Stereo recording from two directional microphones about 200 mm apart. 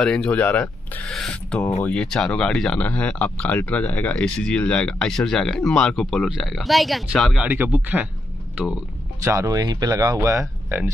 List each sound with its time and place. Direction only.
0.0 s speech: 5° left (ahead or behind)
9.2 s speech: 15° right (ahead or behind)